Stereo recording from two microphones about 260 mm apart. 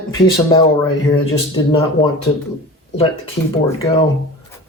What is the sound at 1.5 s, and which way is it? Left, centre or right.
Speech, centre.